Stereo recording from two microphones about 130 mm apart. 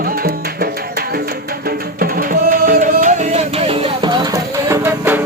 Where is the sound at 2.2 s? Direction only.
90° right; by 3.9 s 50° right (ahead or behind).